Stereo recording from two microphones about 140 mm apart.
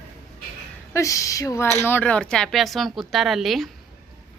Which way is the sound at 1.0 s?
25° left (ahead or behind).